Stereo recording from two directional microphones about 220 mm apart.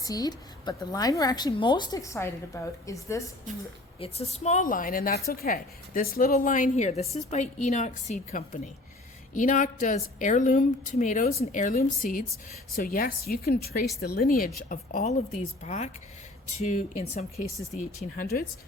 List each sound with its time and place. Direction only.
0.0 s a woman's voice: 15° left (ahead or behind)
4.0 s speech: 30° left (ahead or behind)